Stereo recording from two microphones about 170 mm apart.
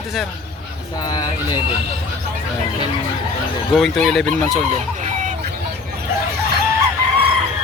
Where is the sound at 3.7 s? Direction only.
Centre (ahead or behind).